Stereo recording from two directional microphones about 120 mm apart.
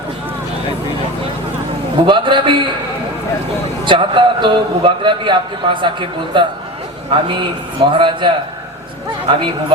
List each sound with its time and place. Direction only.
2.0 s a man's voice: 40° right (ahead or behind)
3.8 s a man's voice: 45° right (ahead or behind)